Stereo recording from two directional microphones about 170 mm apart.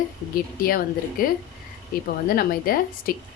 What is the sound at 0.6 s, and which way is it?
A woman's voice, 60° left (ahead or behind).